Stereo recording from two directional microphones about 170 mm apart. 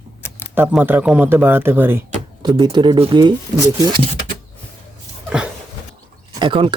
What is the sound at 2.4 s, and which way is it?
Speech, 25° right (ahead or behind).